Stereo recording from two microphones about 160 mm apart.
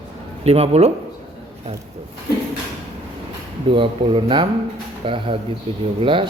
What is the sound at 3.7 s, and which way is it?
Speech, 30° right (ahead or behind).